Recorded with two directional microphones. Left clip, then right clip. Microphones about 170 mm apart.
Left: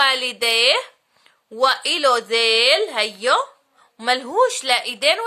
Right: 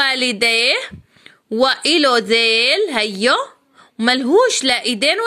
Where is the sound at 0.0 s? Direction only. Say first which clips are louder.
Right 2 dB; 20° right (ahead or behind).